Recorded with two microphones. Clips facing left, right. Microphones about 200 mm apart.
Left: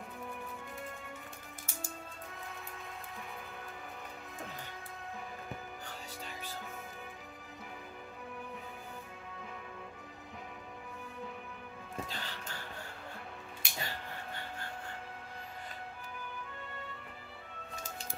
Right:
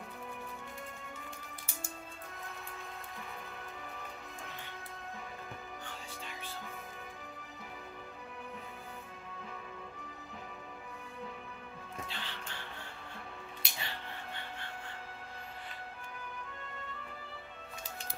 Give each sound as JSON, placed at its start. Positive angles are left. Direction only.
{"t": 5.9, "sound": "music", "side_deg": 40}
{"t": 12.1, "sound": "music", "side_deg": 40}